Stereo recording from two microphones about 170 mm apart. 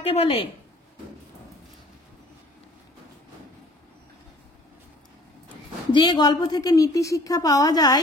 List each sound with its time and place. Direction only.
0.0 s speech: 35° left (ahead or behind)
5.9 s a woman's voice: 25° left (ahead or behind)